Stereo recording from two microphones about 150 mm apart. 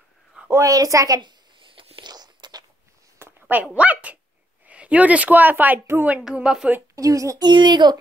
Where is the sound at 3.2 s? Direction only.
15° right (ahead or behind).